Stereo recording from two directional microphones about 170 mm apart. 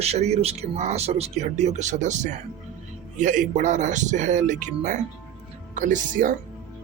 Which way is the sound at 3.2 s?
50° right (ahead or behind).